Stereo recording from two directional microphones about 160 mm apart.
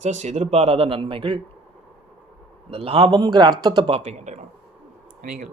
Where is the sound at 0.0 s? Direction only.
45° right (ahead or behind).